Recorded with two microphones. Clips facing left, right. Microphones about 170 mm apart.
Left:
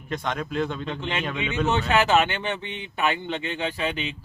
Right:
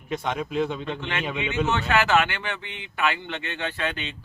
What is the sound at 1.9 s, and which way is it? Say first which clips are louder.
Speech: left 1 dB; 20° left (ahead or behind).